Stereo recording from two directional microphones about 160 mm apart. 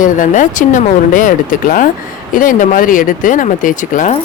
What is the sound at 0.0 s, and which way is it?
Speech, 55° left (ahead or behind).